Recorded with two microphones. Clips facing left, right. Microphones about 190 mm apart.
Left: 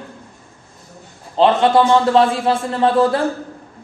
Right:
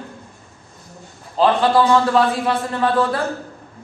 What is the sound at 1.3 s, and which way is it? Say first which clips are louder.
A man's voice: left 2 dB; 25° left (ahead or behind).